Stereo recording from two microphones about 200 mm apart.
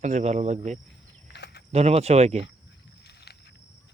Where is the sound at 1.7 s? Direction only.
30° right (ahead or behind).